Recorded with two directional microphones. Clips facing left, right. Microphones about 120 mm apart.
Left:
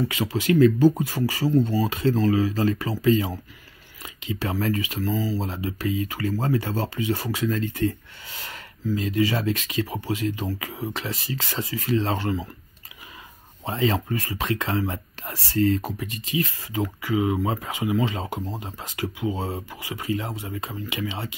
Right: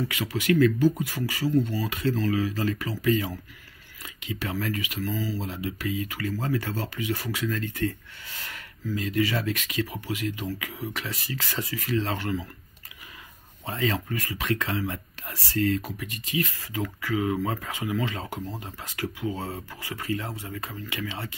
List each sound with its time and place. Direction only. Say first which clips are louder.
0.1 s speech: left 2 dB; 25° left (ahead or behind)
13.7 s speech: left 4 dB; 25° left (ahead or behind)